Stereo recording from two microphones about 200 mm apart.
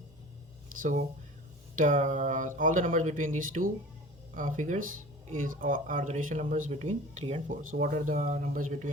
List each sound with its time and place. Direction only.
0.8 s speech: 40° right (ahead or behind)